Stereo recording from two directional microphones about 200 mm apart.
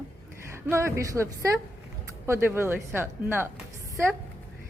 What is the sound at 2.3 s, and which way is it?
Speech, 10° right (ahead or behind).